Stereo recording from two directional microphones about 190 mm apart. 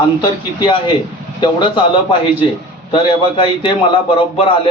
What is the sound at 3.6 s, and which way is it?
Speech, 25° left (ahead or behind).